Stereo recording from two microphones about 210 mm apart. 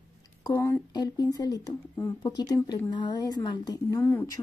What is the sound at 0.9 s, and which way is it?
A woman's voice, 20° left (ahead or behind).